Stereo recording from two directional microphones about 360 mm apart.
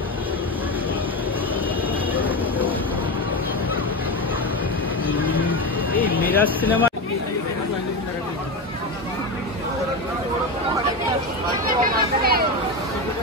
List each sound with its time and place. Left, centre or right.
5.0 s vehicle: centre
6.1 s speech: centre
11.6 s a sound: right